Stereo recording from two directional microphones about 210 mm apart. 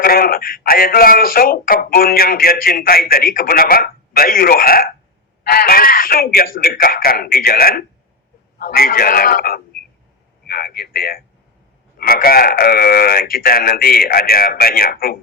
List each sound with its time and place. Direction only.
0.0 s a man's voice: 45° left (ahead or behind)